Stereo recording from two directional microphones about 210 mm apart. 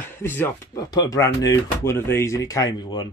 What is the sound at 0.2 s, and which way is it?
Speech, 10° left (ahead or behind).